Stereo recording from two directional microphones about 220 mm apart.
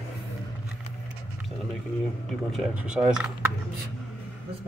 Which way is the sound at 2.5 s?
5° right (ahead or behind).